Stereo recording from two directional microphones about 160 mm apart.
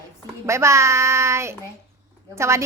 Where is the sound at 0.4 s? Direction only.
15° right (ahead or behind).